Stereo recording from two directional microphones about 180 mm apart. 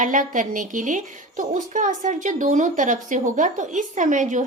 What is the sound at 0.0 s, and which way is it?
A woman's voice, 45° right (ahead or behind).